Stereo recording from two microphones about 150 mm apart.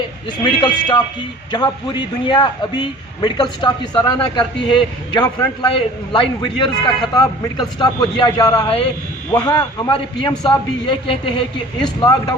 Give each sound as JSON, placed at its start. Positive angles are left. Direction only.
{"t": 0.4, "sound": "a man's voice", "side_deg": 30}